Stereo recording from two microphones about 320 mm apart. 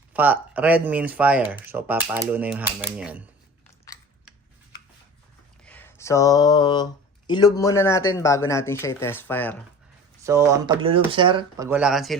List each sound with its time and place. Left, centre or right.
0.1 s speech: centre
5.6 s a sound: centre
7.3 s speech: centre
10.2 s speech: centre